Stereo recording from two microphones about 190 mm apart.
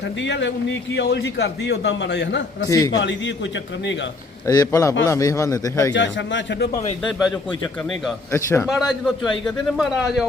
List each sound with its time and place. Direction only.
0.2 s a man's voice: 70° left (ahead or behind)
2.6 s a man's voice: 20° left (ahead or behind)
3.0 s a man's voice: 70° left (ahead or behind)
4.4 s a man's voice: 20° left (ahead or behind)
5.9 s a man's voice: 75° left (ahead or behind)
7.0 s speech: centre (ahead or behind)
8.3 s a man's voice: 15° left (ahead or behind)
8.6 s speech: centre (ahead or behind)